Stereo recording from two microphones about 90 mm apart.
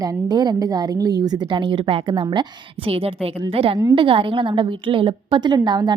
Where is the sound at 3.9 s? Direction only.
70° right (ahead or behind); by 5.9 s 55° right (ahead or behind).